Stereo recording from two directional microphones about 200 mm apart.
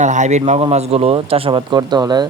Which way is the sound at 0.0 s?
35° right (ahead or behind).